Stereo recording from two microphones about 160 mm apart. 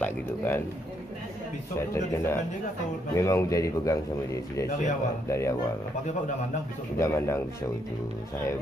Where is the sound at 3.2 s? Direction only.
20° left (ahead or behind).